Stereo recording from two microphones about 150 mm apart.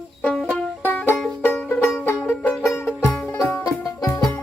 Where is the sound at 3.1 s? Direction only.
5° left (ahead or behind).